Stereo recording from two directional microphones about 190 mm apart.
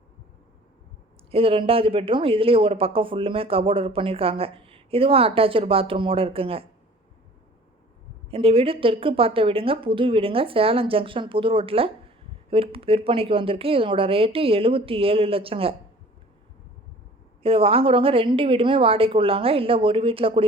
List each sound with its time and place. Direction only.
1.3 s a woman's voice: 30° right (ahead or behind)
8.3 s a woman's voice: 30° right (ahead or behind)
17.4 s a woman's voice: 30° right (ahead or behind)